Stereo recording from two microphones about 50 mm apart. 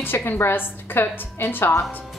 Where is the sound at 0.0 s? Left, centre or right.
Left.